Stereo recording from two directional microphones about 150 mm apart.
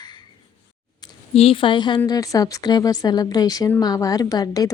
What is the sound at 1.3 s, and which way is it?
A woman's voice, 40° left (ahead or behind).